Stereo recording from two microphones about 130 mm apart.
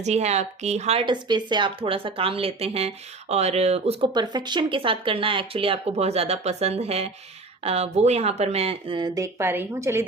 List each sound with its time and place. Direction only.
0.0 s speech: 60° right (ahead or behind)
1.0 s a woman's voice: 35° right (ahead or behind); by 4.1 s 50° right (ahead or behind)
4.1 s a woman's voice: 35° right (ahead or behind)